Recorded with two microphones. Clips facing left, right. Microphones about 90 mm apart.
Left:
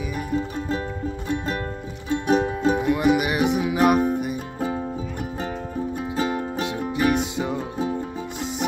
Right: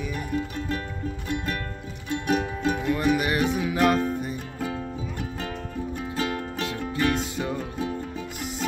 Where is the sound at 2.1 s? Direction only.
30° left (ahead or behind).